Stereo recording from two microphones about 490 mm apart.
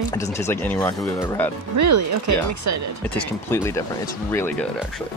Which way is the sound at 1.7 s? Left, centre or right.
Right.